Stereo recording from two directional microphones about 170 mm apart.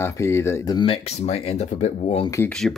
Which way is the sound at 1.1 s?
40° left (ahead or behind).